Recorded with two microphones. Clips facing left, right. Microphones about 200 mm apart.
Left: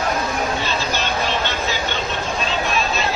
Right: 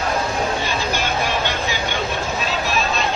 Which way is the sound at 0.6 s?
10° right (ahead or behind).